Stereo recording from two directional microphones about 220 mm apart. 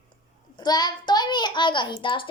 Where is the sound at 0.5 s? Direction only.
20° left (ahead or behind).